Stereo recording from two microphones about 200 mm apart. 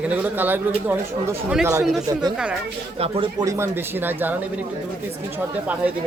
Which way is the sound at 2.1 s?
20° right (ahead or behind).